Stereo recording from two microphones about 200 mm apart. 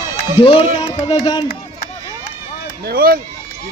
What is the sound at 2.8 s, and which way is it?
Speech, 45° right (ahead or behind).